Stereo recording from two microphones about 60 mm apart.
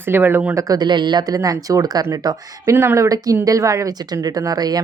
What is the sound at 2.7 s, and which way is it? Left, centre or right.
Speech, right.